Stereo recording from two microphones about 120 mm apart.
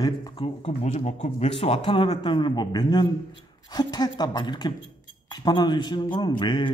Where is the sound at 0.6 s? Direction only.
70° left (ahead or behind).